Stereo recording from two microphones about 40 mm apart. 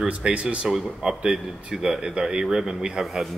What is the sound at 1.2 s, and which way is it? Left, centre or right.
A man's voice, right.